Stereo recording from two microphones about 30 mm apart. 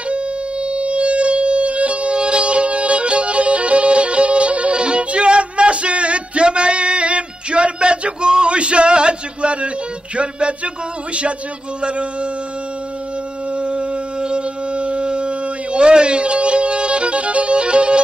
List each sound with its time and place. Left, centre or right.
0.1 s music: right
2.1 s music: right
4.7 s music: right
11.8 s a man's voice: right
13.6 s a sound: right
15.0 s music: right